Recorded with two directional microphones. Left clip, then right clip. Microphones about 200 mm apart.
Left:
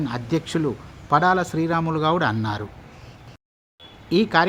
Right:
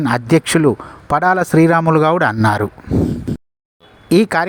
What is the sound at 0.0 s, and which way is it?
Speech, 40° right (ahead or behind).